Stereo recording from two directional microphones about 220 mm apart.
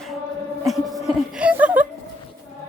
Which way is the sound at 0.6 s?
Centre (ahead or behind).